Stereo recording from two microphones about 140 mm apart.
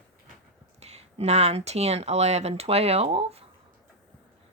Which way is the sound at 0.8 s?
50° right (ahead or behind).